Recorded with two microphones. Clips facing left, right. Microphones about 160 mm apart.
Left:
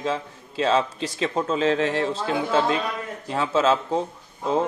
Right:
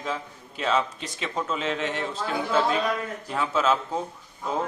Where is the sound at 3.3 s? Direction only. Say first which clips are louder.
Left 4 dB; 30° left (ahead or behind).